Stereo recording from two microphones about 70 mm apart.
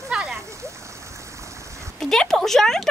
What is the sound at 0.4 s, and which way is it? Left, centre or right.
Stream, right.